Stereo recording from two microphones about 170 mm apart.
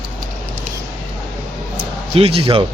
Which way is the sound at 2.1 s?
35° right (ahead or behind).